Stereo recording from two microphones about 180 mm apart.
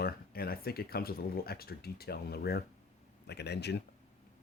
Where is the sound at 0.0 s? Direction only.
55° left (ahead or behind).